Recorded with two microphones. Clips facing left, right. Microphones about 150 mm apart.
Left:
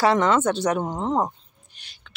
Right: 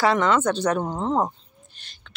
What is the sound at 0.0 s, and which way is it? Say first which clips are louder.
Speech: left 1 dB; 20° left (ahead or behind).